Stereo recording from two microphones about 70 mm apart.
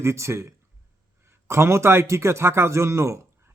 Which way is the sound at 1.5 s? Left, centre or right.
Right.